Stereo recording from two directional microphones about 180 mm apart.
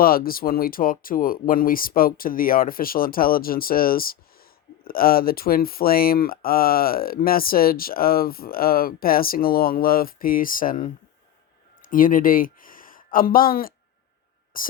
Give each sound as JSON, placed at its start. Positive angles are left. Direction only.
{"t": 0.0, "sound": "speech", "side_deg": 55}